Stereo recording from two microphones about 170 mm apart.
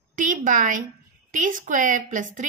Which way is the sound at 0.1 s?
50° right (ahead or behind).